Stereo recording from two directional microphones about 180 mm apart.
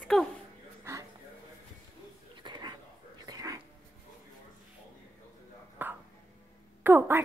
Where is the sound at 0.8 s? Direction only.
15° right (ahead or behind).